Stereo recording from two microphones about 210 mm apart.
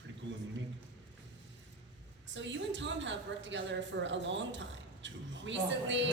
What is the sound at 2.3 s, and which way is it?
Speech, 60° right (ahead or behind).